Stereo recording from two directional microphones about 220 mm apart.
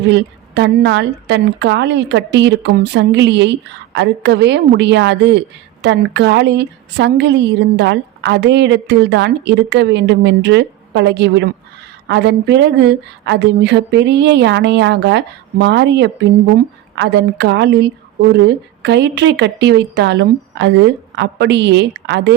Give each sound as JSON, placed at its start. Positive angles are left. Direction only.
{"t": 0.1, "sound": "a woman's voice", "side_deg": -50}